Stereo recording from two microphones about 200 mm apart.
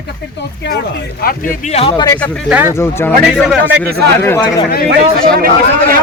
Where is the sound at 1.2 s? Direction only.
40° left (ahead or behind).